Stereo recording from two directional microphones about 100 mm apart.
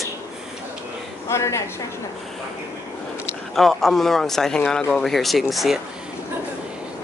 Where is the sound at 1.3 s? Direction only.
30° left (ahead or behind).